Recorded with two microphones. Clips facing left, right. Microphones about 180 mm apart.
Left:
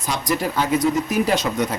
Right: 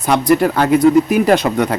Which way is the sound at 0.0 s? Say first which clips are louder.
Right 10 dB; 60° right (ahead or behind).